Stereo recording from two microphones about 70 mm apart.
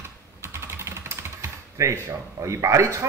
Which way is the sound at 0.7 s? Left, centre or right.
Right.